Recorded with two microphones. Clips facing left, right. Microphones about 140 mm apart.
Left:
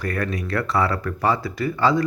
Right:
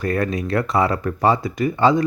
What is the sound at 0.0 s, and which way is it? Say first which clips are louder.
Speech: right 4 dB; 20° right (ahead or behind).